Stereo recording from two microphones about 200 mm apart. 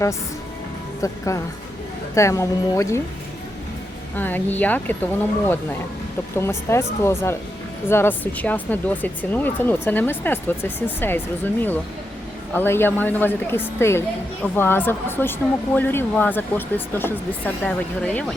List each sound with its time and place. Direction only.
1.0 s speech: 15° left (ahead or behind)
4.1 s speech: 10° left (ahead or behind)
6.3 s speech: 10° left (ahead or behind)